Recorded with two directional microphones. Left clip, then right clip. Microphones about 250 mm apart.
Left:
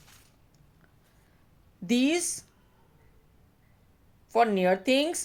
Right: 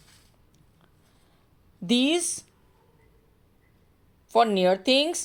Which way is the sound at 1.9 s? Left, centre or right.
Right.